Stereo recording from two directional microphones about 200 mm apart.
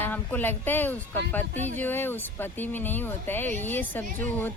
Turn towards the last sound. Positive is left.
turn(degrees=10)  # may be behind; listen again after turning